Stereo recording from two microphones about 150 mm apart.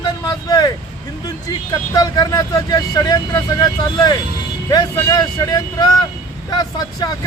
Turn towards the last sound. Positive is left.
turn(degrees=25)  # may be behind; listen again after turning